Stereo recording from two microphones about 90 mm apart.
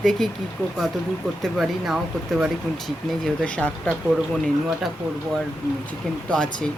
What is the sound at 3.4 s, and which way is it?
Speech, 10° left (ahead or behind).